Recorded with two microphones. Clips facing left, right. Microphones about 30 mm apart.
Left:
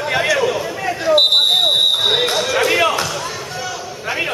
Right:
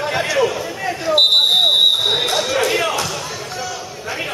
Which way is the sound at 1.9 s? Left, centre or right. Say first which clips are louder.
Left 1 dB; centre.